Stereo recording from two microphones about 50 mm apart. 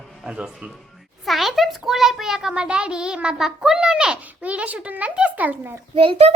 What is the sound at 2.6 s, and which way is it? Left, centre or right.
A child's voice, right.